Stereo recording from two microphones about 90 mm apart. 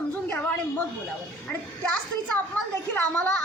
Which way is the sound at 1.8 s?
15° left (ahead or behind).